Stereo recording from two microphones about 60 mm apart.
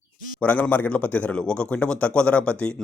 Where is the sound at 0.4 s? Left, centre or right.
Left.